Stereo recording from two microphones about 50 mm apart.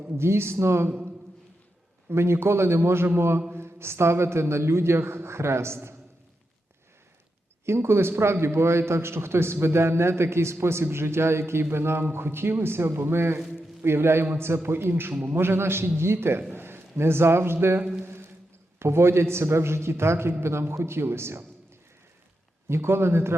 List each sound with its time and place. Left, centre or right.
0.1 s a man's voice: right
0.9 s speech: right
2.0 s a man's voice: right
7.6 s a man's voice: right
18.0 s a sound: right
18.8 s a man's voice: right
22.7 s a man's voice: right